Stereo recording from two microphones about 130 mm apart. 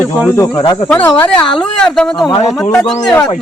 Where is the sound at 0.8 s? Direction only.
15° left (ahead or behind).